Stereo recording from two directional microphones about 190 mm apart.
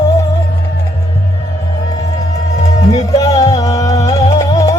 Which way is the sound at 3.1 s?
20° left (ahead or behind).